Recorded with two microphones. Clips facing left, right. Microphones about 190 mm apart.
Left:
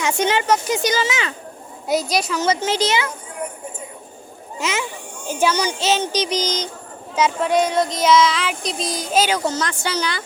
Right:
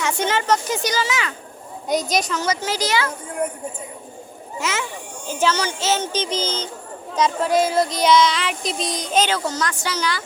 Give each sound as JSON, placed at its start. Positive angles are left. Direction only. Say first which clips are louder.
{"t": 0.0, "sound": "child singing", "louder": "left 2 dB", "side_deg": 20}
{"t": 0.8, "sound": "a woman's voice", "louder": "left 2 dB", "side_deg": 20}
{"t": 1.9, "sound": "child singing", "louder": "left 1 dB", "side_deg": 0}
{"t": 2.4, "sound": "a woman's voice", "louder": "left 4 dB", "side_deg": 20}
{"t": 4.6, "sound": "child singing", "louder": "left 2 dB", "side_deg": 20}
{"t": 7.2, "sound": "child singing", "louder": "left 1 dB", "side_deg": 5}
{"t": 9.6, "sound": "a woman's voice", "louder": "left 1 dB", "side_deg": 25}